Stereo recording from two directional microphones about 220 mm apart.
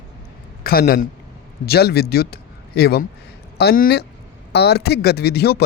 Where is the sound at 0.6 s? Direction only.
45° left (ahead or behind).